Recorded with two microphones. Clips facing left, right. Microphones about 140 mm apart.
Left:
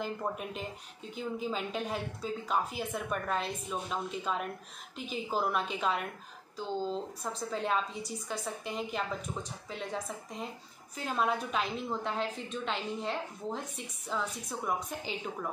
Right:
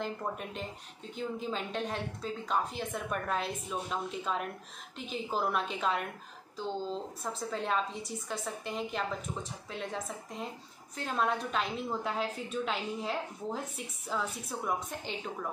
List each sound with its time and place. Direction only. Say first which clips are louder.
0.0 s a woman's voice: left 1 dB; 5° left (ahead or behind)